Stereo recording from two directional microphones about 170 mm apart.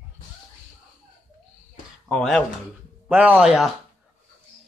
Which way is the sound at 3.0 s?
10° right (ahead or behind).